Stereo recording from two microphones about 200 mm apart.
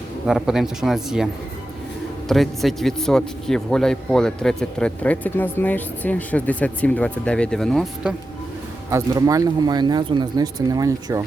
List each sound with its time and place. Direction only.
0.3 s a man's voice: centre (ahead or behind)
2.3 s a man's voice: centre (ahead or behind)
8.9 s speech: 15° right (ahead or behind)